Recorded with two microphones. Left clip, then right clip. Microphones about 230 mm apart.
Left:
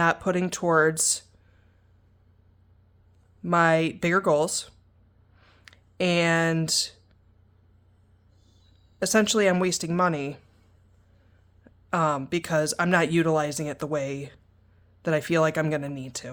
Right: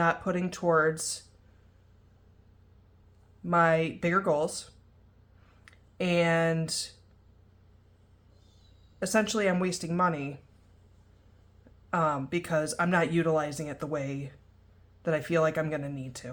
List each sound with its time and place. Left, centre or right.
0.0 s speech: left
3.4 s speech: left
5.4 s a sound: left
9.0 s speech: left
11.9 s speech: left